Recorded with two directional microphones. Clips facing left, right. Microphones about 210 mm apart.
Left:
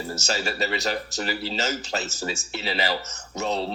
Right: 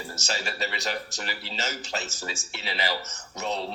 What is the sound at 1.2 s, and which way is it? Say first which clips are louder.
Speech: left 7 dB; 40° left (ahead or behind).